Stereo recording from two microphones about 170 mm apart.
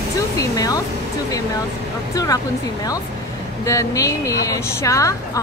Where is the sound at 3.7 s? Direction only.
20° left (ahead or behind).